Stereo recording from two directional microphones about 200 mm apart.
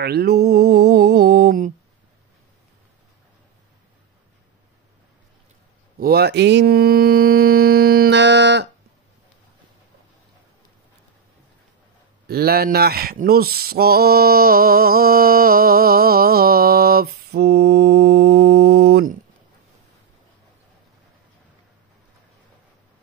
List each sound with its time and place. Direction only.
0.0 s mantra: 50° right (ahead or behind)
5.9 s mantra: 50° right (ahead or behind)
12.3 s male singing: 50° right (ahead or behind)